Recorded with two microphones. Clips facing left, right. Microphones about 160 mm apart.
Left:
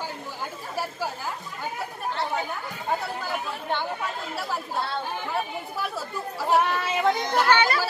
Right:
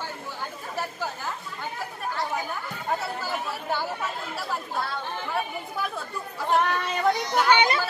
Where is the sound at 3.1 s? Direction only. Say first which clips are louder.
Even; 5° right (ahead or behind).